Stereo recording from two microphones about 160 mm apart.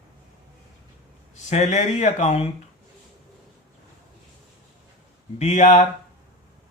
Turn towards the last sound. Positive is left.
turn(degrees=45)  # may be behind; listen again after turning